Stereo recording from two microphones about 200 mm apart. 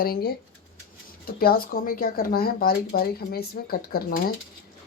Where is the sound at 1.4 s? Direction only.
50° left (ahead or behind).